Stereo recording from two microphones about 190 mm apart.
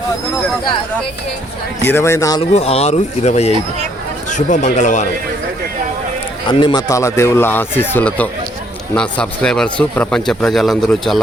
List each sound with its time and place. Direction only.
1.8 s speech: 10° left (ahead or behind)
2.4 s speech: 30° left (ahead or behind)
6.5 s a man's voice: 25° left (ahead or behind); by 11.2 s centre (ahead or behind)